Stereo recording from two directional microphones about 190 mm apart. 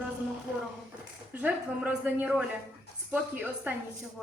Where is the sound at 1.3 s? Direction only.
10° right (ahead or behind).